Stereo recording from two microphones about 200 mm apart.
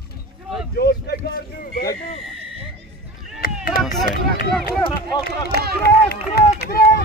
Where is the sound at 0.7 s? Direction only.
50° left (ahead or behind).